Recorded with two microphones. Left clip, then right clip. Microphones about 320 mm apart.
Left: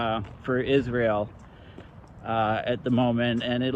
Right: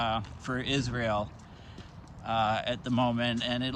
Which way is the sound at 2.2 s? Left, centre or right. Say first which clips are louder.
Left 3 dB; centre.